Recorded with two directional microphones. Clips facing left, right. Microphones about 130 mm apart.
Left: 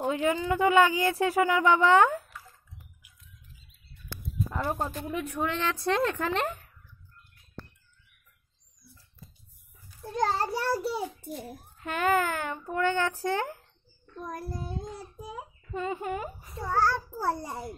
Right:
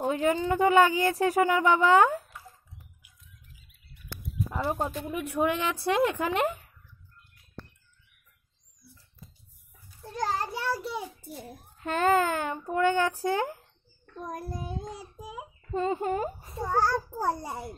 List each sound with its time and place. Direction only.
0.2 s a child's voice: 30° right (ahead or behind)
1.9 s speech: 15° right (ahead or behind)
4.5 s a child's voice: 5° right (ahead or behind)
10.0 s a child's voice: 25° left (ahead or behind)
11.8 s a child's voice: 30° right (ahead or behind)
12.2 s a child's voice: 15° right (ahead or behind)
15.0 s a child's voice: 10° right (ahead or behind)
15.7 s a child's voice: 30° right (ahead or behind); by 17.6 s 15° right (ahead or behind)